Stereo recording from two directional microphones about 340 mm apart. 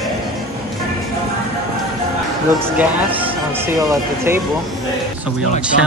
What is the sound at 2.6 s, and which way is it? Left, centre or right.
Speech, centre.